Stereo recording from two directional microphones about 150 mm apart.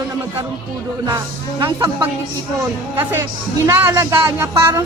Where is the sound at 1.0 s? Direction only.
30° right (ahead or behind).